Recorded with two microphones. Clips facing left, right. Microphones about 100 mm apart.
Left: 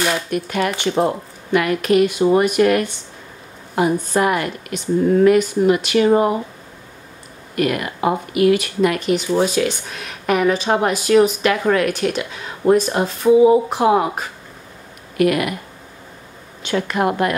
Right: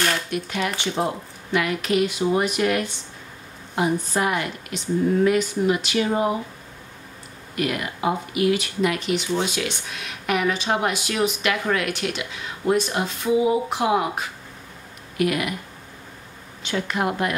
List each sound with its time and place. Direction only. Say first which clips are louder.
0.3 s speech: left 5 dB; 50° left (ahead or behind)
7.5 s speech: left 6 dB; 55° left (ahead or behind)
15.1 s speech: left 6 dB; 55° left (ahead or behind)
16.6 s speech: left 5 dB; 55° left (ahead or behind)